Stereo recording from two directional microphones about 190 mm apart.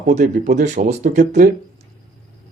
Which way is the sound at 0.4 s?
40° right (ahead or behind).